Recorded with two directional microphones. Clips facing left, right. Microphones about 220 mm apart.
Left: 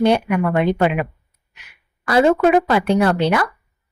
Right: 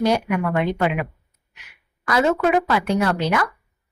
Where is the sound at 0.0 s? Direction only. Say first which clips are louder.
Left 4 dB; 30° left (ahead or behind).